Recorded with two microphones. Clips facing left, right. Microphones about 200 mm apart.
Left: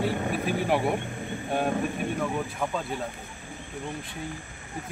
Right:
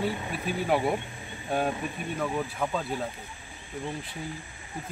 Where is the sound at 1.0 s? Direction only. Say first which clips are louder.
Left 8 dB; 55° left (ahead or behind).